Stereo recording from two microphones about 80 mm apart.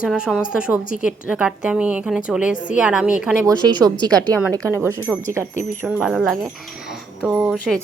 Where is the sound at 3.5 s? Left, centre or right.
Right.